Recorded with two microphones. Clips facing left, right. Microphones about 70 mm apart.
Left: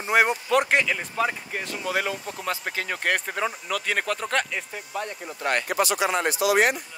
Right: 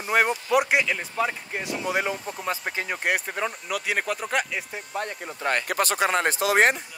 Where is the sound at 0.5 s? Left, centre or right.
Centre.